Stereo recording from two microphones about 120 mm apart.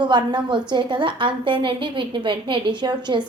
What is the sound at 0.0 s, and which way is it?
A woman's voice, 40° right (ahead or behind).